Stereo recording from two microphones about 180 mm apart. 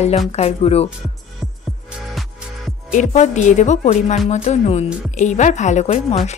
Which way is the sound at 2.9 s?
40° left (ahead or behind).